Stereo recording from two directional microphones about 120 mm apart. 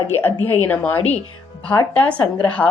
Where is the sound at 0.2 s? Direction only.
20° left (ahead or behind).